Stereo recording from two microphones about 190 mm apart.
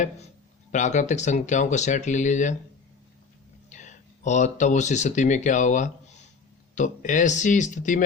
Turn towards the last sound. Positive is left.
turn(degrees=40)  # may be behind; listen again after turning